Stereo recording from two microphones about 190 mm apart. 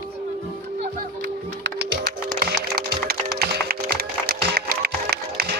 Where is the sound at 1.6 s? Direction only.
60° right (ahead or behind).